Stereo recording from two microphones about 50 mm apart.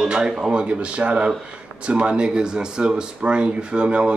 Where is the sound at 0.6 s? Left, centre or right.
Right.